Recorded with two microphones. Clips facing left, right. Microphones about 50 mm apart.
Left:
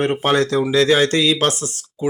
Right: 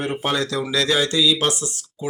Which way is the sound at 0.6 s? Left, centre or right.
Left.